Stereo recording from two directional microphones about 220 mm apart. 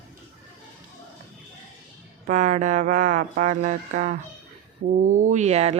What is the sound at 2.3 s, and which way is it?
Speech, 35° right (ahead or behind).